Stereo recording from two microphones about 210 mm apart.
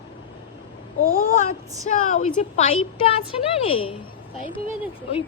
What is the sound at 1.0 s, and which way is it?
A woman's voice, 45° left (ahead or behind).